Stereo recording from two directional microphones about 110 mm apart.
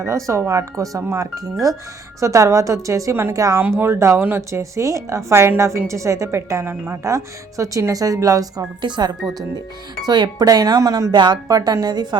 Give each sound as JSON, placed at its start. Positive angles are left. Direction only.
{"t": 0.0, "sound": "a woman's voice", "side_deg": -30}
{"t": 3.6, "sound": "a woman's voice", "side_deg": -20}
{"t": 11.1, "sound": "speech", "side_deg": -40}